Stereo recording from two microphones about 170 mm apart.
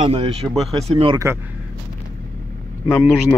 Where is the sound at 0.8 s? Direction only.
35° right (ahead or behind).